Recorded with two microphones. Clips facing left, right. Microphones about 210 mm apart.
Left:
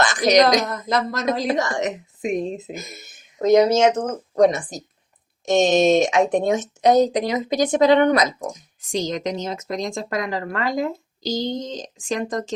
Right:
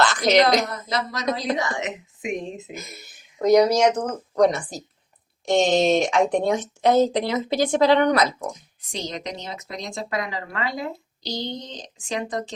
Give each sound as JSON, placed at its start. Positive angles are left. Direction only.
{"t": 0.0, "sound": "a sound", "side_deg": 15}
{"t": 0.9, "sound": "speech", "side_deg": 50}
{"t": 3.4, "sound": "speech", "side_deg": 25}
{"t": 8.4, "sound": "speech", "side_deg": 45}